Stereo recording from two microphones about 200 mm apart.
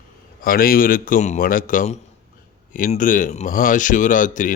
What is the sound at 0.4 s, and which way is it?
A man's voice, 45° left (ahead or behind).